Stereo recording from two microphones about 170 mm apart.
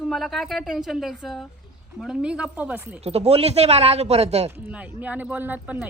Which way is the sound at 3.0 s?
40° right (ahead or behind).